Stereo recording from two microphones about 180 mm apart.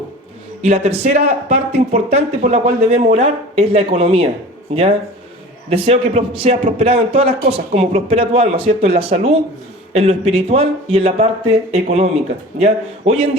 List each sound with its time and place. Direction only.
0.6 s speech: 35° right (ahead or behind)